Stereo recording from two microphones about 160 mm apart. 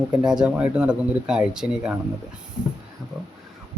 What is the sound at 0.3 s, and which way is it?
Speech, 5° right (ahead or behind).